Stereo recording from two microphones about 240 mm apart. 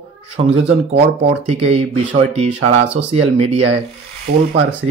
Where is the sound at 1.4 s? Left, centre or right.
Right.